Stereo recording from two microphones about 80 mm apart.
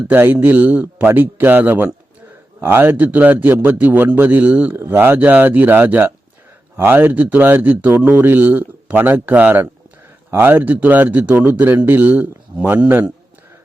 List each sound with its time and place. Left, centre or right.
0.1 s speech: right